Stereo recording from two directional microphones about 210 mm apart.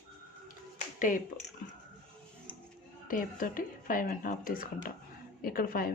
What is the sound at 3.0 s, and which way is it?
A woman's voice, 40° left (ahead or behind).